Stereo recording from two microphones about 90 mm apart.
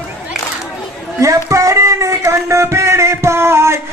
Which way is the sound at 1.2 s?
35° right (ahead or behind).